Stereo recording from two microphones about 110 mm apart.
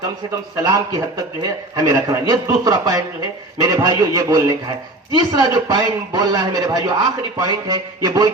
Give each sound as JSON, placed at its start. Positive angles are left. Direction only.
{"t": 0.5, "sound": "a man's voice", "side_deg": -35}